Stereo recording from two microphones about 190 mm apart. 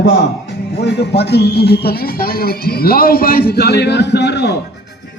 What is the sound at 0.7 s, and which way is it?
Speech, 60° left (ahead or behind).